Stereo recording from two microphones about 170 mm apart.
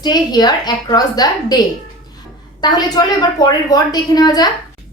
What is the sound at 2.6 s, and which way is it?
A woman's voice, 25° left (ahead or behind).